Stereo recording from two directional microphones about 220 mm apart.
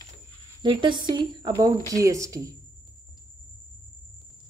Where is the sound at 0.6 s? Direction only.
20° right (ahead or behind).